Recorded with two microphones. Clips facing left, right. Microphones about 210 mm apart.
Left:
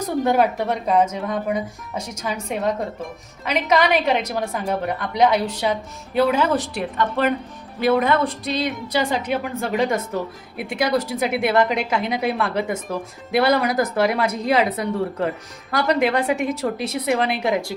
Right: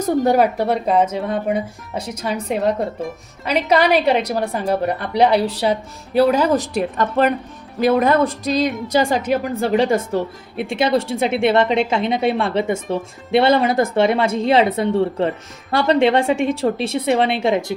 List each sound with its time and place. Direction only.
0.3 s a woman's voice: 35° right (ahead or behind)